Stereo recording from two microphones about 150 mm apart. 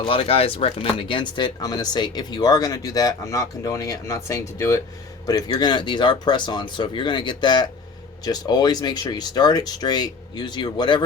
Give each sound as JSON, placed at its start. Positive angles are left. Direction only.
{"t": 0.0, "sound": "speech", "side_deg": 35}